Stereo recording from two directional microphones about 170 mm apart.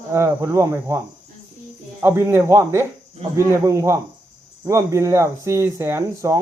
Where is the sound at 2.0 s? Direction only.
15° right (ahead or behind).